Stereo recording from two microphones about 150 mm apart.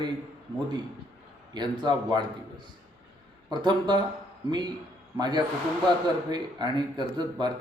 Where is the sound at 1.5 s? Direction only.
30° right (ahead or behind).